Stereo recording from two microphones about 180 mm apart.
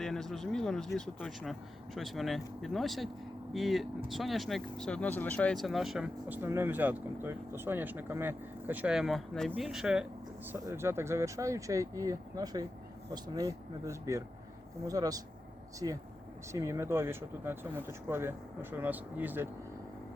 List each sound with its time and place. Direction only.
0.0 s speech: centre (ahead or behind)